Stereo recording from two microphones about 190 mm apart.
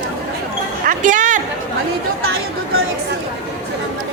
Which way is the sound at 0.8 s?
40° right (ahead or behind).